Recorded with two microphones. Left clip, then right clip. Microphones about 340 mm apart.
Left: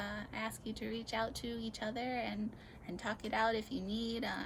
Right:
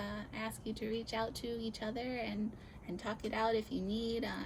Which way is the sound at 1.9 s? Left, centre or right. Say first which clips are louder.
Left 3 dB; left.